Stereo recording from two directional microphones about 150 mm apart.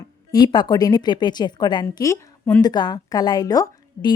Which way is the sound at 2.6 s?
25° left (ahead or behind).